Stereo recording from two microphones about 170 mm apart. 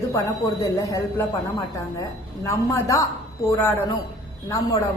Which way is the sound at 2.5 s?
20° left (ahead or behind).